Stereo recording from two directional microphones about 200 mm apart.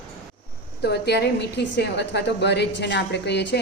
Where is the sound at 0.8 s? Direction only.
55° left (ahead or behind).